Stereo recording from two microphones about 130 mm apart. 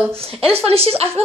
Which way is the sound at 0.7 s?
50° right (ahead or behind).